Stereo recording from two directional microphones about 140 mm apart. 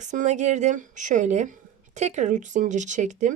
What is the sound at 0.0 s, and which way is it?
Speech, 60° right (ahead or behind).